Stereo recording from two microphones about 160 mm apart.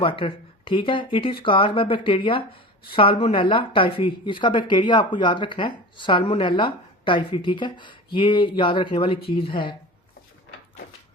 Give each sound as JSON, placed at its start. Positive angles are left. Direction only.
{"t": 0.0, "sound": "speech", "side_deg": 35}